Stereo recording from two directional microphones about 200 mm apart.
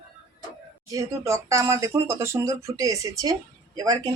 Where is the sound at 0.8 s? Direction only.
15° right (ahead or behind).